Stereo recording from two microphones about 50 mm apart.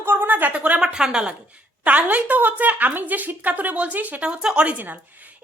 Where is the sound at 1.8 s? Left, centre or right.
Right.